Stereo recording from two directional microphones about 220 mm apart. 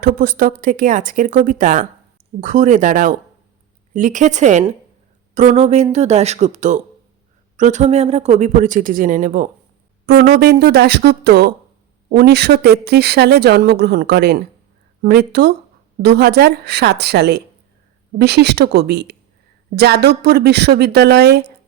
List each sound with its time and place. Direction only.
0.0 s speech: 40° right (ahead or behind)